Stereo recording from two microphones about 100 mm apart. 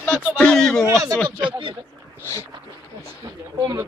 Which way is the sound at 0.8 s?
35° right (ahead or behind).